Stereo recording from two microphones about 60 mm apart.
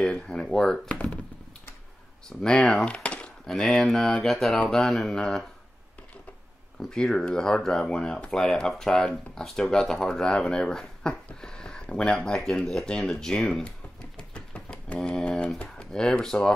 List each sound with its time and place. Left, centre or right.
0.0 s speech: centre
2.2 s speech: centre
4.3 s mantra: centre
6.9 s speech: centre
8.3 s speech: centre
11.2 s a sound: centre
12.5 s speech: centre
14.1 s a sound: centre
15.0 s speech: centre